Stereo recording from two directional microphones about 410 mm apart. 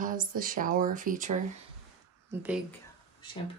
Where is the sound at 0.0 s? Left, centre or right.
Centre.